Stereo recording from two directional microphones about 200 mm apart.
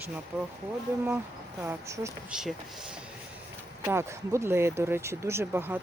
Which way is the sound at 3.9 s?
15° right (ahead or behind).